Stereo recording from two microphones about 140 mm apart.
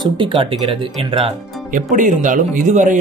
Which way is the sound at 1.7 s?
65° right (ahead or behind).